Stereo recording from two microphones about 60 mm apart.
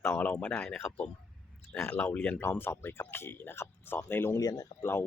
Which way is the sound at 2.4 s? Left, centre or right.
Left.